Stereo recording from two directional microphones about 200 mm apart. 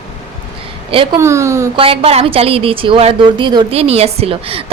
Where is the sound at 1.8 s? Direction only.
30° right (ahead or behind).